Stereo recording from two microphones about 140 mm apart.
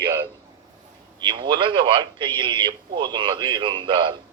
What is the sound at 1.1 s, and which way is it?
Speech, 35° right (ahead or behind).